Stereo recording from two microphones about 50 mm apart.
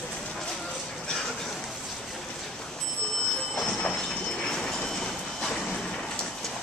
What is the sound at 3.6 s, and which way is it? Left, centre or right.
Train, centre.